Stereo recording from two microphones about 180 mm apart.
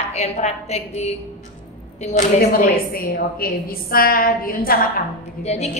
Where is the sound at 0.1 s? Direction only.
35° left (ahead or behind).